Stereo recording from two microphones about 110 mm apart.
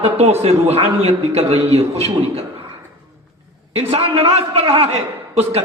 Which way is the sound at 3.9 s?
60° right (ahead or behind).